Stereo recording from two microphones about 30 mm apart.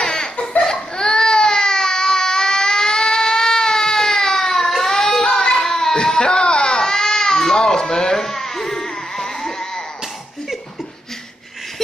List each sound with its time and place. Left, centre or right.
0.0 s laughter: left
0.7 s baby cry: left
5.6 s a sound: centre
5.9 s baby cry: left